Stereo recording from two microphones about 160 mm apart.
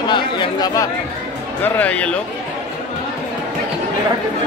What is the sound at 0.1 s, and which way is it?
Chatter, 25° left (ahead or behind).